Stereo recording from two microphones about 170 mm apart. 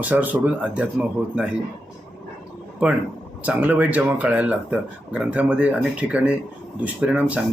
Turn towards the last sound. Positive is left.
turn(degrees=-10)  # may be behind; listen again after turning